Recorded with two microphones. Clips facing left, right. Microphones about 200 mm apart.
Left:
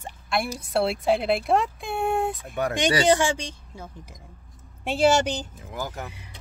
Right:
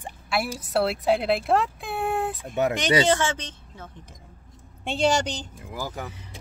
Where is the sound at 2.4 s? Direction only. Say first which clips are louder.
Even; 20° right (ahead or behind).